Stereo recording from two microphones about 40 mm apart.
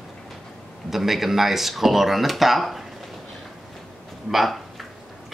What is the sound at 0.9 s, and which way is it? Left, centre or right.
Speech, centre.